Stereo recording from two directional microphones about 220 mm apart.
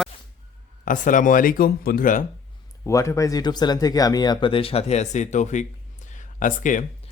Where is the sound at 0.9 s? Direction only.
35° left (ahead or behind).